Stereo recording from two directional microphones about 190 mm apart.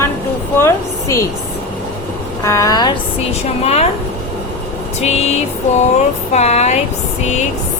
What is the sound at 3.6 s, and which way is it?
Speech, 35° left (ahead or behind).